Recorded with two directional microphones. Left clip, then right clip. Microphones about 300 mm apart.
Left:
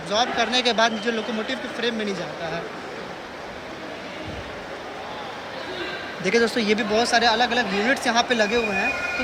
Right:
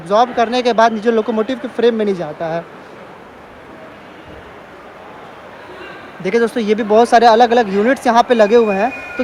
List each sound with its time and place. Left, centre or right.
0.1 s speech: centre
6.2 s speech: centre